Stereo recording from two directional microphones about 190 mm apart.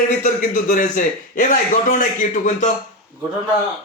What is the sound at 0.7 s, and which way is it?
A man's voice, 45° left (ahead or behind).